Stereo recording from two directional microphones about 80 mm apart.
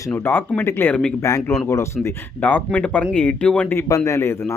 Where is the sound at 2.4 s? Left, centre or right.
Left.